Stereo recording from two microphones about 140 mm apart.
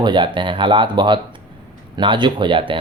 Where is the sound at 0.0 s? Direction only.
35° right (ahead or behind).